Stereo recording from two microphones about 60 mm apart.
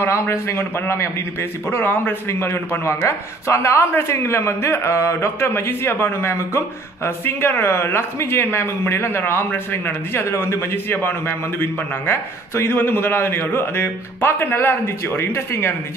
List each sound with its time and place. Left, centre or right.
0.0 s speech: left